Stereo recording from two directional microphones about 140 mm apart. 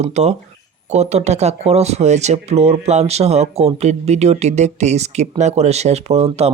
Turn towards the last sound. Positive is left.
turn(degrees=-50)  # may be behind; listen again after turning